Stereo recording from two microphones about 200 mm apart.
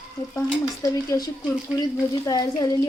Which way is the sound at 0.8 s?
15° left (ahead or behind).